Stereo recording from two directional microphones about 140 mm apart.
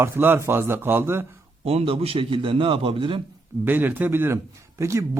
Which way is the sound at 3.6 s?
15° right (ahead or behind).